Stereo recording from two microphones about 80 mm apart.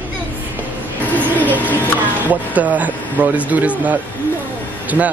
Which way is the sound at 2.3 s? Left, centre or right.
Centre.